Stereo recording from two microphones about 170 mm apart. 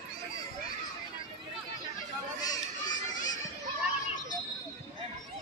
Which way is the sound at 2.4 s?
20° left (ahead or behind).